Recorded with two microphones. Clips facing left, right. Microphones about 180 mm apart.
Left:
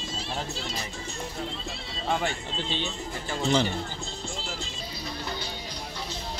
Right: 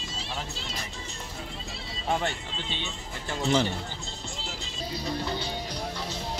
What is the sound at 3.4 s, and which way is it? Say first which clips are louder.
Speech: even; 5° right (ahead or behind).